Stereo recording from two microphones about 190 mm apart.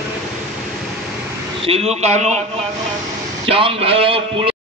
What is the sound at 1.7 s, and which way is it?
Speech, 35° right (ahead or behind).